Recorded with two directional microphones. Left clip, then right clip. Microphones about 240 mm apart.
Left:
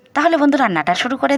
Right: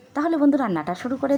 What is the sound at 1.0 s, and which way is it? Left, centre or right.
Speech, left.